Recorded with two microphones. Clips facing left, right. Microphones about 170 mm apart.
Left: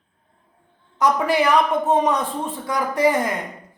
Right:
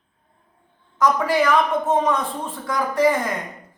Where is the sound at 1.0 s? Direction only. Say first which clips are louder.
Even; 20° left (ahead or behind).